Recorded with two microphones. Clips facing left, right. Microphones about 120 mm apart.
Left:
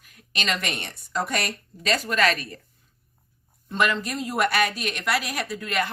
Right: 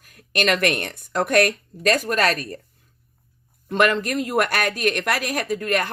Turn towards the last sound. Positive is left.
turn(degrees=-50)  # may be behind; listen again after turning